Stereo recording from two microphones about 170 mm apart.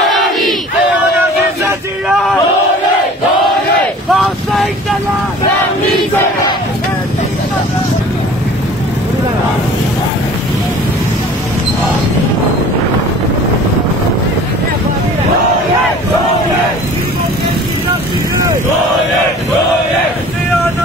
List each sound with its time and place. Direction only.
0.0 s crowd: centre (ahead or behind)
4.1 s vehicle: centre (ahead or behind)